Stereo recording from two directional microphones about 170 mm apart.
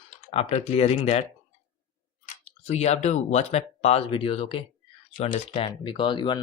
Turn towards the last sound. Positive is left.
turn(degrees=30)  # may be behind; listen again after turning